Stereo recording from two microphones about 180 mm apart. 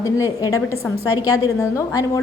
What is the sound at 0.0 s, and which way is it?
A woman's voice, 20° left (ahead or behind).